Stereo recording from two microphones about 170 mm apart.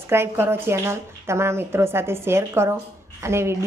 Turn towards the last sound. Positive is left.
turn(degrees=-15)  # may be behind; listen again after turning